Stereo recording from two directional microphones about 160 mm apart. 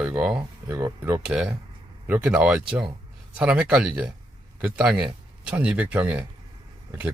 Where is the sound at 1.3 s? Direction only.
5° right (ahead or behind).